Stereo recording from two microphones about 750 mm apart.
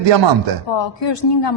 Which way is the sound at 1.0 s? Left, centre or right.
Left.